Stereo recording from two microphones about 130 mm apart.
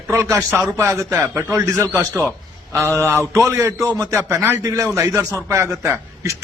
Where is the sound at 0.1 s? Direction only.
25° right (ahead or behind).